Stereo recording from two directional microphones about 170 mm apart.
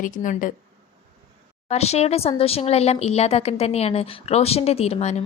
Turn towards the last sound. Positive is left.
turn(degrees=40)  # may be behind; listen again after turning